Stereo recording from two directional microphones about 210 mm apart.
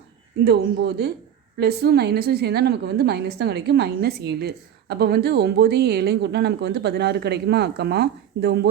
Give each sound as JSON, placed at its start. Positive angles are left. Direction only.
{"t": 0.4, "sound": "a woman's voice", "side_deg": -50}